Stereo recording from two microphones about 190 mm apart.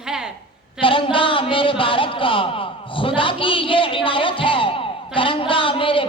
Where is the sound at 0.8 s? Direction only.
25° left (ahead or behind).